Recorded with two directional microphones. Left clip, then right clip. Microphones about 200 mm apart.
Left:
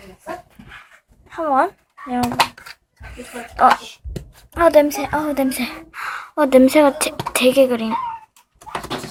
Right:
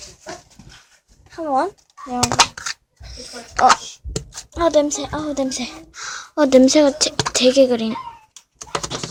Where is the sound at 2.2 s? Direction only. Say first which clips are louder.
Right 3 dB; 50° right (ahead or behind).